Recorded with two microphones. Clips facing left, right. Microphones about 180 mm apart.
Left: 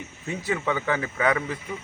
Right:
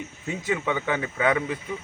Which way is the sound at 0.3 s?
15° right (ahead or behind).